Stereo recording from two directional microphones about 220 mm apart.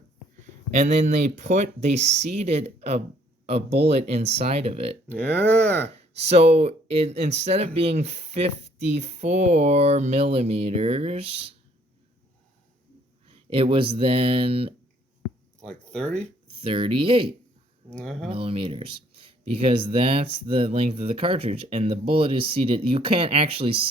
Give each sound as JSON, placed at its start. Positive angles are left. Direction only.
{"t": 0.7, "sound": "speech", "side_deg": -35}
{"t": 5.0, "sound": "speech", "side_deg": 5}
{"t": 5.9, "sound": "speech", "side_deg": -30}
{"t": 13.2, "sound": "speech", "side_deg": -25}
{"t": 15.6, "sound": "speech", "side_deg": 5}
{"t": 16.6, "sound": "speech", "side_deg": -25}
{"t": 17.9, "sound": "speech", "side_deg": 0}
{"t": 18.3, "sound": "speech", "side_deg": -25}